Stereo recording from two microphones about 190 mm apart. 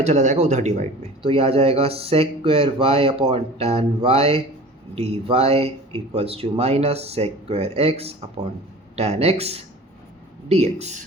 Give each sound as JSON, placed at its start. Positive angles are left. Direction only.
{"t": 0.0, "sound": "speech", "side_deg": -35}